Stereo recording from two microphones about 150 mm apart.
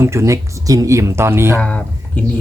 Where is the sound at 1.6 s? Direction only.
10° left (ahead or behind).